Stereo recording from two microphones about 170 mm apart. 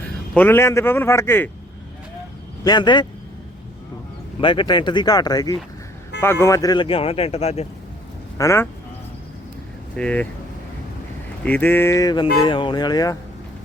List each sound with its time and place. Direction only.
0.3 s a man's voice: 15° left (ahead or behind)
2.6 s speech: 25° left (ahead or behind)
4.4 s speech: 30° left (ahead or behind)
8.4 s a man's voice: 15° left (ahead or behind)
9.9 s a man's voice: 5° left (ahead or behind)
11.4 s speech: 10° left (ahead or behind)